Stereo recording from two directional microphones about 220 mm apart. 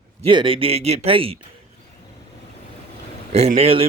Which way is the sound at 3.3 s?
30° right (ahead or behind).